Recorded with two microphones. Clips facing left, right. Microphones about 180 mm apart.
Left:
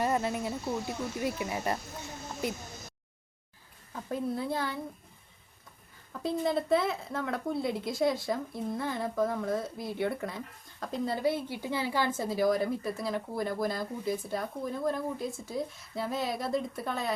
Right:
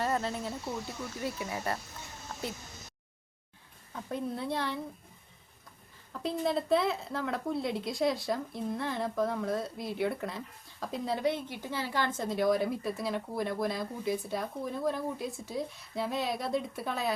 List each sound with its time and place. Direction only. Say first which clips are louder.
0.0 s speech: left 2 dB; 15° left (ahead or behind)
3.9 s speech: left 2 dB; centre (ahead or behind)
6.1 s speech: left 1 dB; centre (ahead or behind)